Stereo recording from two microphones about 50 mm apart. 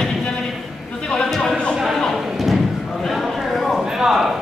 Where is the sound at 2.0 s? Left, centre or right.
Centre.